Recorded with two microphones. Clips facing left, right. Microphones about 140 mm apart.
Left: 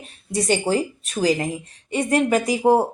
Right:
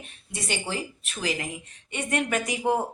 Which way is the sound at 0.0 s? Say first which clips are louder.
Left 12 dB; 35° left (ahead or behind).